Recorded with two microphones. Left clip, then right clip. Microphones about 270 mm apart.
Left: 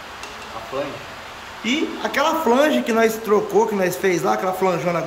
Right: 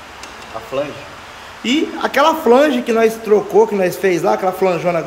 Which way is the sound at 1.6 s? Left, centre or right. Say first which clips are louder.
Right 5 dB; centre.